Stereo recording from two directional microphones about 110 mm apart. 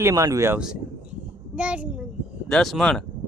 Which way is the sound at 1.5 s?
10° right (ahead or behind).